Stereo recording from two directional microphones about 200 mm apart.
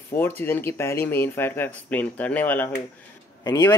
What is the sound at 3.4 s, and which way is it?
Speech, 20° left (ahead or behind).